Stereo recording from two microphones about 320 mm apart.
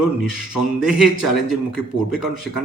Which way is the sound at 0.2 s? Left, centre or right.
Centre.